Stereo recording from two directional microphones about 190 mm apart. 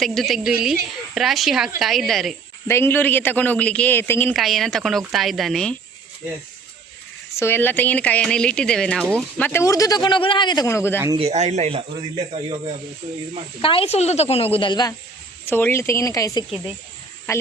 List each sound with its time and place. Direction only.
0.0 s a woman's voice: centre (ahead or behind)
2.6 s a man's voice: 10° left (ahead or behind)
7.3 s a man's voice: 10° left (ahead or behind)
11.2 s speech: 35° right (ahead or behind)
13.6 s a woman's voice: 30° left (ahead or behind)
15.4 s a man's voice: 10° left (ahead or behind)